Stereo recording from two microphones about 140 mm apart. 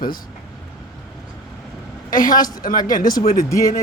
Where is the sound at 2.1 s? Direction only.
80° left.